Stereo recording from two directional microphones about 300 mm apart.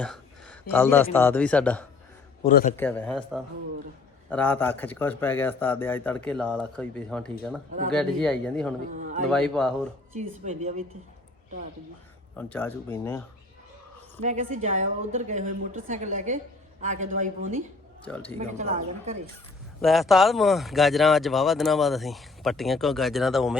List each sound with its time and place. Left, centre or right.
0.0 s a sound: centre
0.7 s speech: centre
2.4 s a man's voice: left
2.7 s speech: centre
10.2 s a woman's voice: right
12.4 s speech: centre
14.2 s a woman's voice: right
18.3 s a woman's voice: right
19.8 s speech: centre